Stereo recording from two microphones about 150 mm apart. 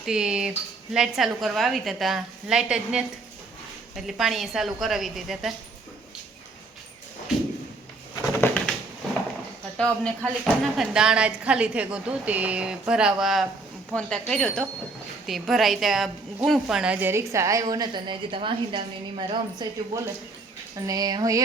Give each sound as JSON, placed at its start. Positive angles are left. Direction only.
{"t": 0.0, "sound": "a woman's voice", "side_deg": -5}
{"t": 8.3, "sound": "bird", "side_deg": 10}
{"t": 9.7, "sound": "a woman's voice", "side_deg": 5}